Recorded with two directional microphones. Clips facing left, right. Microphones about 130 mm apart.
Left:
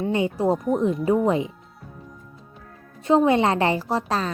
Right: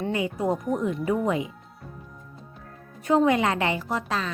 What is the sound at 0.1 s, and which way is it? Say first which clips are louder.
Speech: left 5 dB; 30° left (ahead or behind).